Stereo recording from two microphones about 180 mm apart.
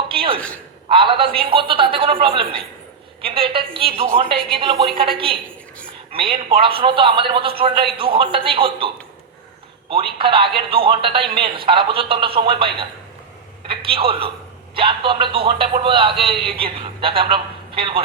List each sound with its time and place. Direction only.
0.1 s a sound: 30° right (ahead or behind)
0.3 s a man's voice: 5° left (ahead or behind)
0.9 s a woman's voice: 30° right (ahead or behind)
9.9 s a woman's voice: 30° right (ahead or behind)